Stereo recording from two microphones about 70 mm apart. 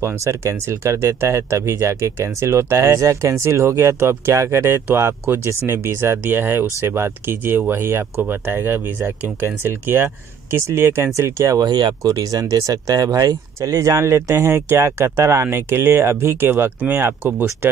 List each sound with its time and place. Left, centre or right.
0.0 s speech: right
11.6 s speech: right
12.0 s speech: right
13.6 s speech: right